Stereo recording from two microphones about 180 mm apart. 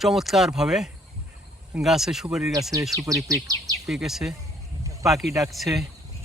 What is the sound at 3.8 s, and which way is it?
Speech, centre (ahead or behind).